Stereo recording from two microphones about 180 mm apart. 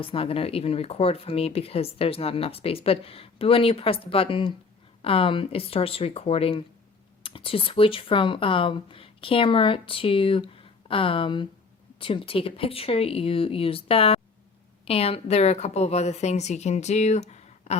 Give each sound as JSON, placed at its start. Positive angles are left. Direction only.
{"t": 0.0, "sound": "speech", "side_deg": 30}